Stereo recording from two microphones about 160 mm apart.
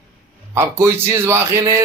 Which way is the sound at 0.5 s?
15° right (ahead or behind).